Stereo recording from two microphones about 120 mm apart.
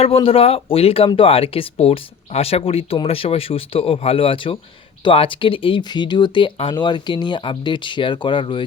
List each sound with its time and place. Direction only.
0.0 s speech: 50° left (ahead or behind)